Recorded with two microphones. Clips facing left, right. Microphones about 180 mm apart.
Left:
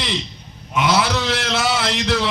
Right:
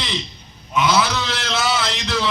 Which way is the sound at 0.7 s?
60° left (ahead or behind).